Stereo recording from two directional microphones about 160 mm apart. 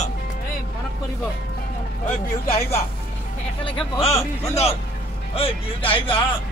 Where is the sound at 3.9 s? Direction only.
40° left (ahead or behind).